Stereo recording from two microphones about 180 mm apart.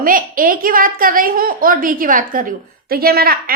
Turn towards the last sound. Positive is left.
turn(degrees=-60)  # may be behind; listen again after turning